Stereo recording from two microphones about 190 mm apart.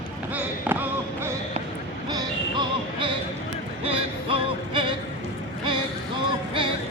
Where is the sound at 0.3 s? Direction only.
10° right (ahead or behind).